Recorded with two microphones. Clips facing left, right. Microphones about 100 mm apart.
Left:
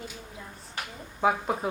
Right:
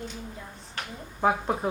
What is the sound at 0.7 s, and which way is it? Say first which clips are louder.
Speech: right 1 dB; 5° left (ahead or behind).